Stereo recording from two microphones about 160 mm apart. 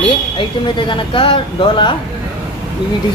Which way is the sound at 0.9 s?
30° left (ahead or behind).